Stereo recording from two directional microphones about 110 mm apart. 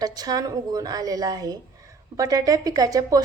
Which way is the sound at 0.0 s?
35° right (ahead or behind).